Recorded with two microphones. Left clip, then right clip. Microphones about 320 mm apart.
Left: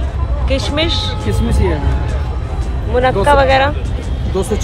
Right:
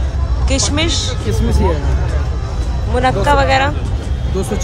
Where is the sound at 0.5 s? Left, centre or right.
Centre.